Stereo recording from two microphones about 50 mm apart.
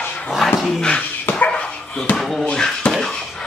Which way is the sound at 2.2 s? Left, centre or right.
Centre.